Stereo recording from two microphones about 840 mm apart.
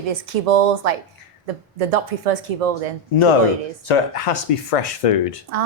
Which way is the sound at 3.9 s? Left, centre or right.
Left.